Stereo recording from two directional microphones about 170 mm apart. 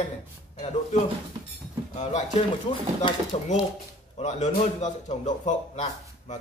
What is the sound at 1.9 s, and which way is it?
Speech, 40° left (ahead or behind).